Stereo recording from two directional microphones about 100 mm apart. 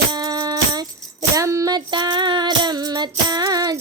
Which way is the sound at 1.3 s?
30° right (ahead or behind).